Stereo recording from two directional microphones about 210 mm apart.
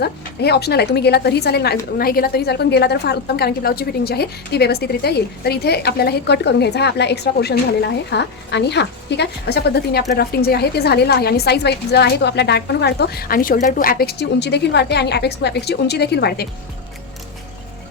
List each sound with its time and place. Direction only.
0.0 s a woman's voice: 50° left (ahead or behind)